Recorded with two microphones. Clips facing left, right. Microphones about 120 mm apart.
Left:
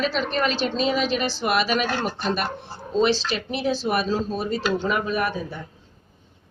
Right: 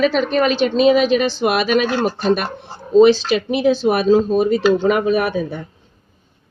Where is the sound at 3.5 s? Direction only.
60° right (ahead or behind).